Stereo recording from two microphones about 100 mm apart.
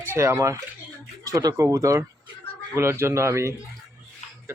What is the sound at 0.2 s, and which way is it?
Speech, 30° right (ahead or behind).